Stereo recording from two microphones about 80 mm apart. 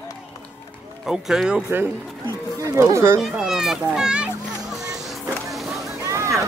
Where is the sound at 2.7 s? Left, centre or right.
Right.